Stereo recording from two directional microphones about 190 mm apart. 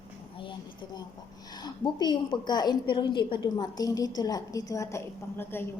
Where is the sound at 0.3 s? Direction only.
25° left (ahead or behind).